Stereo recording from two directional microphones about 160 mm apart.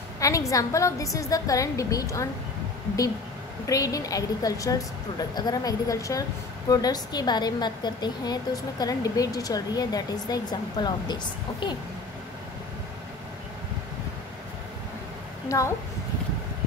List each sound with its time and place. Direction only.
0.2 s a woman's voice: 20° left (ahead or behind)
3.6 s a woman's voice: 20° left (ahead or behind)
15.4 s a woman's voice: 20° left (ahead or behind)